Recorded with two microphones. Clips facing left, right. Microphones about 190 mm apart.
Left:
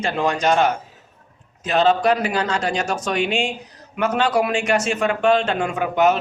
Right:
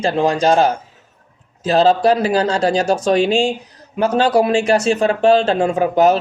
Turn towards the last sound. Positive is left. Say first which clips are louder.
# right 5 dB
turn(degrees=-35)  # may be behind; listen again after turning